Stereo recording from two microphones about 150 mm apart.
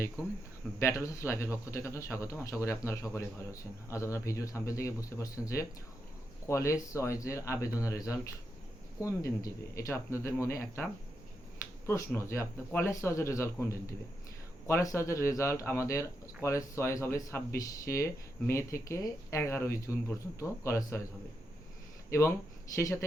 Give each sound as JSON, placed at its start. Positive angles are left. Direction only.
{"t": 0.8, "sound": "speech", "side_deg": 20}
{"t": 11.9, "sound": "speech", "side_deg": 15}
{"t": 22.7, "sound": "speech", "side_deg": 20}